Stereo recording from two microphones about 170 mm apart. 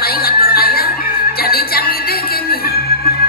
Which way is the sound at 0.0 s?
60° left (ahead or behind).